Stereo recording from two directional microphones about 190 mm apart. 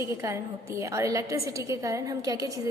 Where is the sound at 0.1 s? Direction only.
15° right (ahead or behind).